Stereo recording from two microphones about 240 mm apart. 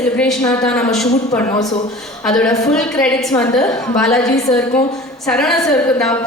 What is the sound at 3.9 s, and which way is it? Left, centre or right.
Speech, centre.